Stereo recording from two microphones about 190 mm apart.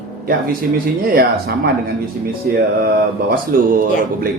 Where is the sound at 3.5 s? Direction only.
50° right (ahead or behind).